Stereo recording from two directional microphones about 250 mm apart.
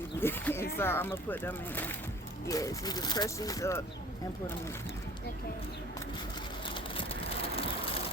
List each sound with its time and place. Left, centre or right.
0.2 s speech: centre
7.5 s vehicle: left